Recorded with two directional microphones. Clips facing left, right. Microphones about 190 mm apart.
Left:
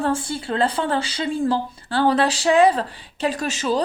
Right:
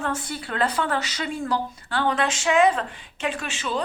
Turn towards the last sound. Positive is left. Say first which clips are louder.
# left 6 dB
turn(degrees=40)  # may be behind; listen again after turning